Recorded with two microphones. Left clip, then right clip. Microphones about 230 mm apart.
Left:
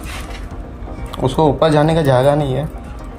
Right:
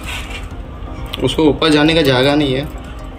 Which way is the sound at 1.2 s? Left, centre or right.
Left.